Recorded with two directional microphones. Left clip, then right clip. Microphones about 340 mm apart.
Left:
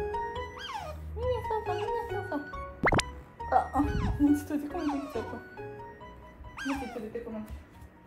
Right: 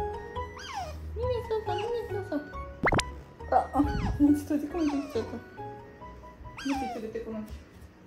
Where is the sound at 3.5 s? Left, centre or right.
Left.